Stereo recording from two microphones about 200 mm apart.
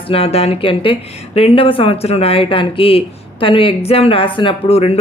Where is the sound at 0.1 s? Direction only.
30° left (ahead or behind).